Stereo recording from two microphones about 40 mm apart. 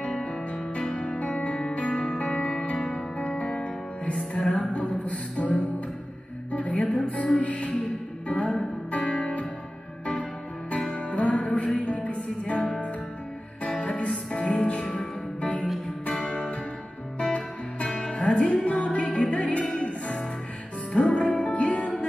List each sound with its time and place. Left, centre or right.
0.2 s music: left
8.9 s music: left
11.0 s music: left
13.9 s music: left
20.9 s music: left